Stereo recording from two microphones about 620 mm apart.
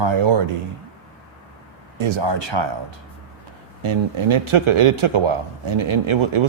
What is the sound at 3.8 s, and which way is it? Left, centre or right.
A man's voice, right.